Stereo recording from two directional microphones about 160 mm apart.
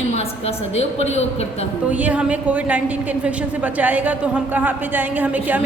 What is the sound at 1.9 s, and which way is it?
A woman's voice, 10° right (ahead or behind).